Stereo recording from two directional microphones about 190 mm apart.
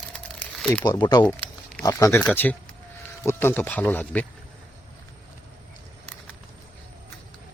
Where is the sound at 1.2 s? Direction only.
10° left (ahead or behind).